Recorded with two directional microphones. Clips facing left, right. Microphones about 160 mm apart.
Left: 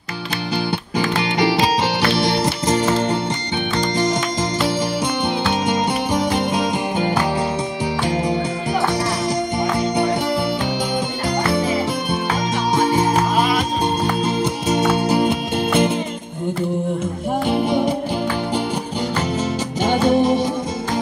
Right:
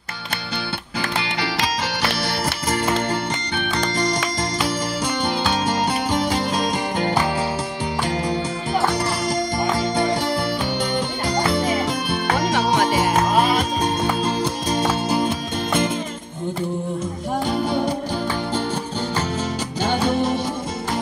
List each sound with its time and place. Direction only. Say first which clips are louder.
2.4 s music: left 4 dB; 20° left (ahead or behind)
8.1 s music: left 3 dB; 20° left (ahead or behind)
12.4 s music: right 1 dB; 80° right
15.0 s music: left 4 dB; 20° left (ahead or behind)
19.8 s music: left 5 dB; 15° left (ahead or behind)